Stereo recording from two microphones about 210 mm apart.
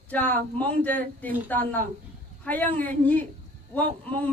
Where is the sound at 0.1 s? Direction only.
10° left (ahead or behind).